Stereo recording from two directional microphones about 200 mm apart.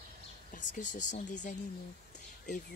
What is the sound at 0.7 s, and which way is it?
Speech, 40° left (ahead or behind).